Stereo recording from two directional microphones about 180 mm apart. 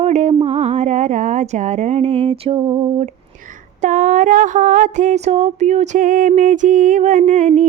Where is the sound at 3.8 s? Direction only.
45° right (ahead or behind).